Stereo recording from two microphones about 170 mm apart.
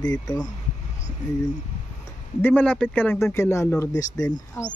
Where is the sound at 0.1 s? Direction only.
20° left (ahead or behind).